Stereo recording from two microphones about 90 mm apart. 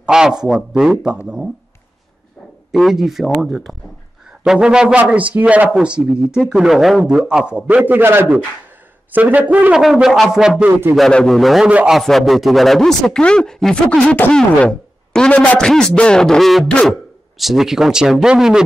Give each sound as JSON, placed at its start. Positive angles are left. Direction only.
{"t": 0.0, "sound": "a man's voice", "side_deg": -5}
{"t": 2.7, "sound": "a man's voice", "side_deg": -5}
{"t": 9.8, "sound": "a man's voice", "side_deg": -5}
{"t": 11.0, "sound": "a man's voice", "side_deg": 5}
{"t": 11.6, "sound": "a man's voice", "side_deg": -10}
{"t": 12.0, "sound": "a man's voice", "side_deg": 0}